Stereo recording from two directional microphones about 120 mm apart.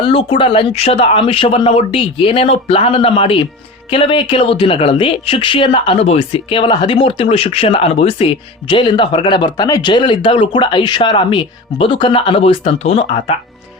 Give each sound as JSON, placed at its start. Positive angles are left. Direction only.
{"t": 0.0, "sound": "speech", "side_deg": 50}